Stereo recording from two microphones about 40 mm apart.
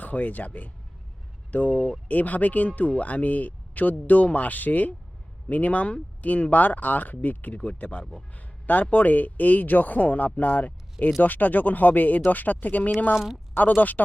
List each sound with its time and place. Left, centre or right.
0.0 s speech: left
7.6 s speech: left